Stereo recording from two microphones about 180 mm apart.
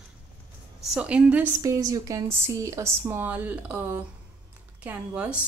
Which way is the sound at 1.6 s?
20° right (ahead or behind).